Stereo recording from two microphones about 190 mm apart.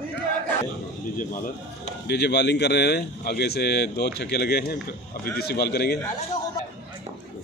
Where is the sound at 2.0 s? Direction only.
60° left (ahead or behind).